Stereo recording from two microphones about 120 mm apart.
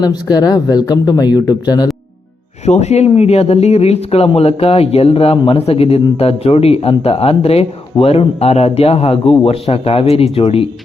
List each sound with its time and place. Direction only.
0.0 s speech: 35° left (ahead or behind)
2.6 s speech: 65° left (ahead or behind)